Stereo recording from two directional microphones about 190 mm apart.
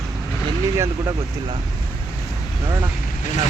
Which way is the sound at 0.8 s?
20° right (ahead or behind).